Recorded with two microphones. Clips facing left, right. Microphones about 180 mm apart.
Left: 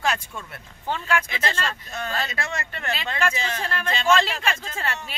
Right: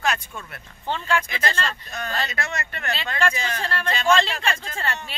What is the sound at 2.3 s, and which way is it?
Speech, 30° left (ahead or behind).